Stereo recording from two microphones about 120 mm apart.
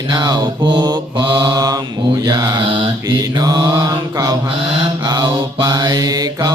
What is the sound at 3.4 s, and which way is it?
Mantra, 30° right (ahead or behind).